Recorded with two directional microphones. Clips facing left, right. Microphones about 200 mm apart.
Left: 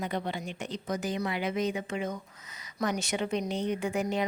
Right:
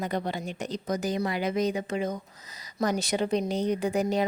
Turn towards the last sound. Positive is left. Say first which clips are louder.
# right 4 dB
turn(degrees=-35)  # may be behind; listen again after turning